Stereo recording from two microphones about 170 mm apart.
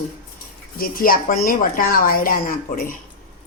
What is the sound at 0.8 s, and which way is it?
Speech, 55° left (ahead or behind).